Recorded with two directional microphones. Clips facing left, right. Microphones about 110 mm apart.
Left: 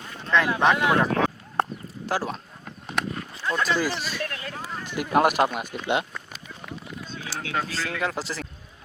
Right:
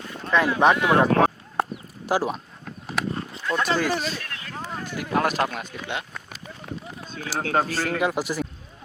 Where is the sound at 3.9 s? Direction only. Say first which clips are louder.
Right 4 dB; 45° right (ahead or behind).